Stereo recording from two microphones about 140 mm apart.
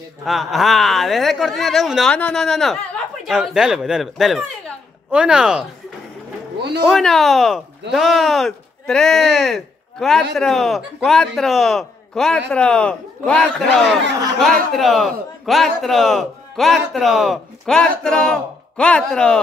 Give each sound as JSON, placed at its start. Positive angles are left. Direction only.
{"t": 0.2, "sound": "speech", "side_deg": 0}
{"t": 6.9, "sound": "speech", "side_deg": 0}